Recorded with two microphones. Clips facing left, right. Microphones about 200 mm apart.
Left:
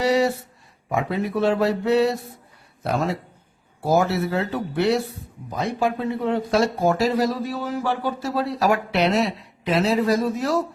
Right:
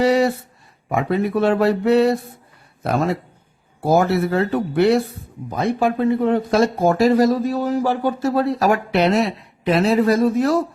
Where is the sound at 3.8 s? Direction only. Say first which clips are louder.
Right 4 dB; 55° right (ahead or behind).